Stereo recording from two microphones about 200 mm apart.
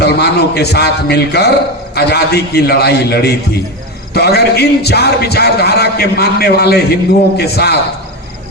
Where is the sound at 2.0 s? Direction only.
55° left (ahead or behind).